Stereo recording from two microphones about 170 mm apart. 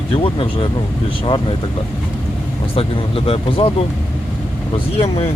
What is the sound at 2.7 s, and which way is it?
Speech, 35° left (ahead or behind).